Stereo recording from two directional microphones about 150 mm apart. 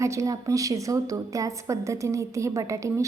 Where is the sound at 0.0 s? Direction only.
20° right (ahead or behind).